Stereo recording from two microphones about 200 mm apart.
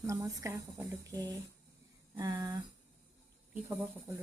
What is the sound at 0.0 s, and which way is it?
Speech, 15° right (ahead or behind).